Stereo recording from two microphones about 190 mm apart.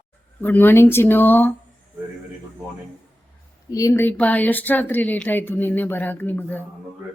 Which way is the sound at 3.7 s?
15° left (ahead or behind).